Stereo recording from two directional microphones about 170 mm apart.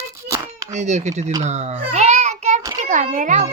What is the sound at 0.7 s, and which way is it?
Speech, 45° right (ahead or behind).